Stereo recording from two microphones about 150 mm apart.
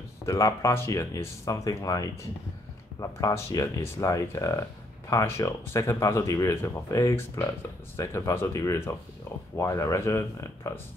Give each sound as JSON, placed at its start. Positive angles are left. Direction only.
{"t": 0.2, "sound": "speech", "side_deg": 20}